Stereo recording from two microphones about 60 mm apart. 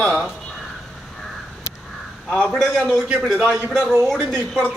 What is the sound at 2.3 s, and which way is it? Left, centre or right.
Speech, centre.